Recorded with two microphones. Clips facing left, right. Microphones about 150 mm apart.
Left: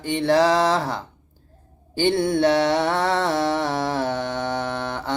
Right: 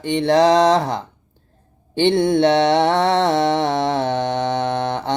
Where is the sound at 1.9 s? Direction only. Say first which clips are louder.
Right 4 dB; 20° right (ahead or behind).